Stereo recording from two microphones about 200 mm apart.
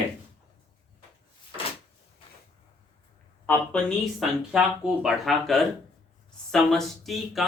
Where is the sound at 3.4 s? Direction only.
5° left (ahead or behind).